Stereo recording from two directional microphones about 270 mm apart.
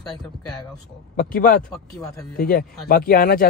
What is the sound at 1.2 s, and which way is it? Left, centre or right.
Speech, left.